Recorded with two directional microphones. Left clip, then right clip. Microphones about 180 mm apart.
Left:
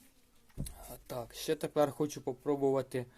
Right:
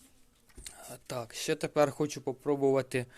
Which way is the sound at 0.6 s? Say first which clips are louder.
Right 5 dB; 25° right (ahead or behind).